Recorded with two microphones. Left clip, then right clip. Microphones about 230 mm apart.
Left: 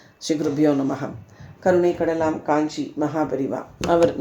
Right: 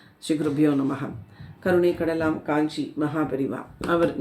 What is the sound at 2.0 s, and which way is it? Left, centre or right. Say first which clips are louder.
Speech: left 3 dB; right.